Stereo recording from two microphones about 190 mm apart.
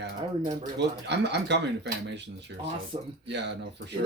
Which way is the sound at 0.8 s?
65° right (ahead or behind).